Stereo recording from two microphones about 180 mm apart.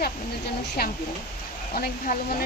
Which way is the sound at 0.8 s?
60° left (ahead or behind).